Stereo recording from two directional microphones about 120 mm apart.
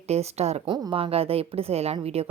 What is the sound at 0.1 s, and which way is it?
Speech, 60° right (ahead or behind).